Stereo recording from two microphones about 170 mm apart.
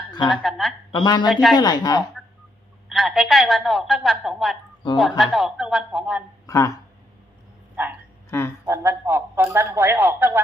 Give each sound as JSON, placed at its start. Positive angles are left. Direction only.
{"t": 0.1, "sound": "a sound", "side_deg": 25}
{"t": 0.4, "sound": "a woman's voice", "side_deg": 0}
{"t": 0.9, "sound": "speech", "side_deg": 25}
{"t": 1.3, "sound": "a woman's voice", "side_deg": 0}
{"t": 1.5, "sound": "speech", "side_deg": 25}
{"t": 2.9, "sound": "a woman's voice", "side_deg": 0}
{"t": 6.5, "sound": "speech", "side_deg": 20}
{"t": 7.8, "sound": "a man's voice", "side_deg": -10}